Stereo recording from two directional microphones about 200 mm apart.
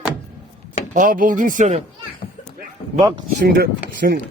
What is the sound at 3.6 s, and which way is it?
Speech, 50° right (ahead or behind).